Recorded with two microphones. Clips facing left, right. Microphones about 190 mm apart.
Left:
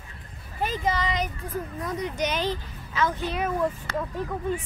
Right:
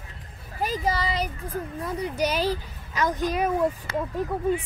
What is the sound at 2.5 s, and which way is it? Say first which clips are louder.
Speech: right 1 dB; 40° right (ahead or behind).